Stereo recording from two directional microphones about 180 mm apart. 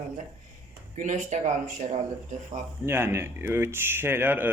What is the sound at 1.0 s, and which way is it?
Speech, 45° right (ahead or behind).